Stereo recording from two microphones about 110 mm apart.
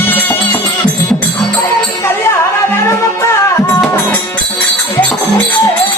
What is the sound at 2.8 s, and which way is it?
Music, 30° left (ahead or behind).